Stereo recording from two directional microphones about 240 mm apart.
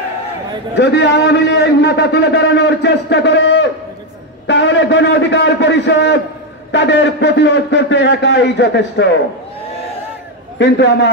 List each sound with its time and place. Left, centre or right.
0.7 s a man's voice: left
10.6 s a man's voice: left